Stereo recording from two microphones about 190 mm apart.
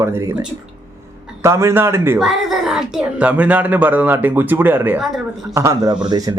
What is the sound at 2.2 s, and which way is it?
A man's voice, centre (ahead or behind).